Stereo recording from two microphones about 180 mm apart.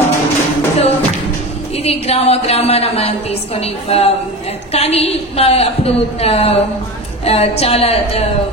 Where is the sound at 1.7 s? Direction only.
35° left (ahead or behind).